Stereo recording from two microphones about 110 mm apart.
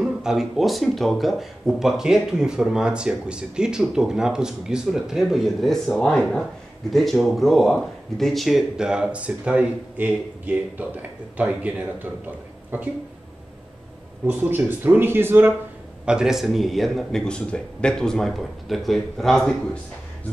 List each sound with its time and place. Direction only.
0.0 s speech: 5° right (ahead or behind)
14.2 s speech: 15° right (ahead or behind)
16.1 s speech: 5° right (ahead or behind)